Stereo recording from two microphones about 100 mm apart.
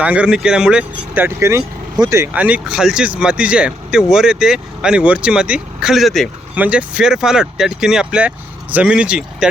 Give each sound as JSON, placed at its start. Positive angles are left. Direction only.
{"t": 0.0, "sound": "speech", "side_deg": -15}
{"t": 1.2, "sound": "speech", "side_deg": -30}
{"t": 2.3, "sound": "speech", "side_deg": -15}
{"t": 6.6, "sound": "speech", "side_deg": -10}